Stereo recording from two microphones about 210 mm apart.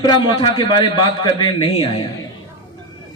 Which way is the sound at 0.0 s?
20° left (ahead or behind).